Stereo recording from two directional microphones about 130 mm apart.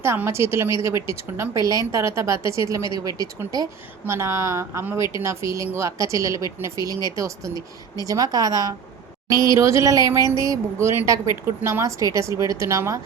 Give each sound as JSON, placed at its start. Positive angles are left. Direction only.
{"t": 0.0, "sound": "a woman's voice", "side_deg": -20}
{"t": 9.3, "sound": "speech", "side_deg": 30}
{"t": 9.6, "sound": "a woman's voice", "side_deg": -25}